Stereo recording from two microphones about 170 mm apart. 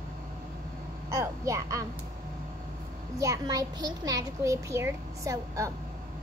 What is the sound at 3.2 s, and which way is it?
A child's voice, 20° right (ahead or behind).